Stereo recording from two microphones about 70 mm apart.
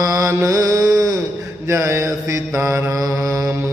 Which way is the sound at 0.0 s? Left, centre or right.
Right.